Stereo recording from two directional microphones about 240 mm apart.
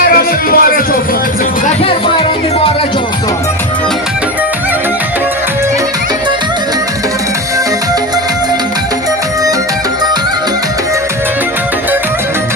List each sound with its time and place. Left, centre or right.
0.0 s music: left
1.8 s music: left